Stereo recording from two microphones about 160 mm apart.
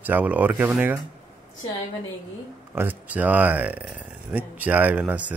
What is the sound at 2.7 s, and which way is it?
Speech, 10° right (ahead or behind).